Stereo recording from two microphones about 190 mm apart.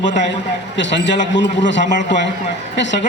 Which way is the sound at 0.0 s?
70° left (ahead or behind).